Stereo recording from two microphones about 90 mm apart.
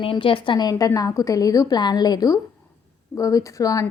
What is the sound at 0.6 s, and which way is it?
A woman's voice, 40° left (ahead or behind).